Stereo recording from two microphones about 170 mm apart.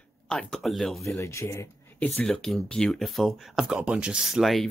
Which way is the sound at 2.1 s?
5° left (ahead or behind).